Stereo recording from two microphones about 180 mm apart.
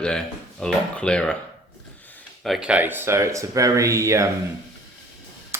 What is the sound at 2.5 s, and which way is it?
Speech, 5° right (ahead or behind).